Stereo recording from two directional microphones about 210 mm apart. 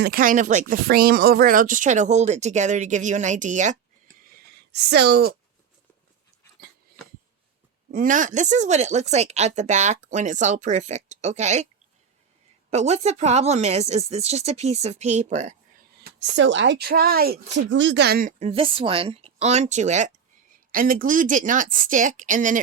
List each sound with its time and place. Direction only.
0.0 s speech: 45° right (ahead or behind)
4.3 s a sound: 50° right (ahead or behind)
7.9 s speech: 40° right (ahead or behind)
12.7 s speech: 30° right (ahead or behind)
16.2 s a woman's voice: 60° right (ahead or behind)
17.5 s speech: 60° right (ahead or behind); by 22.6 s 40° right (ahead or behind)